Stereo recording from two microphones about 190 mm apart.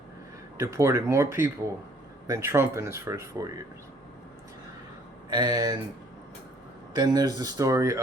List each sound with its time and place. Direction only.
0.5 s speech: 15° right (ahead or behind)
5.3 s speech: 20° right (ahead or behind)
6.9 s speech: 20° right (ahead or behind)